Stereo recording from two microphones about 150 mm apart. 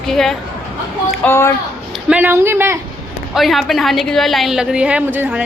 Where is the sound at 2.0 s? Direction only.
10° right (ahead or behind).